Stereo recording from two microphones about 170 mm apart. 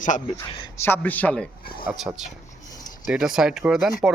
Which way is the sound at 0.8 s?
10° left (ahead or behind).